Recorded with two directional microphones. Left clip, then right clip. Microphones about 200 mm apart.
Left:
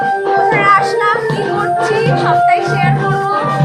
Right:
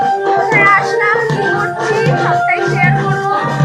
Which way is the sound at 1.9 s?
25° right (ahead or behind).